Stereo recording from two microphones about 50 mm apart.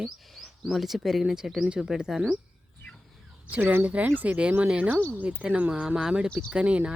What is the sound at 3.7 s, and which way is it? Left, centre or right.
Speech, right.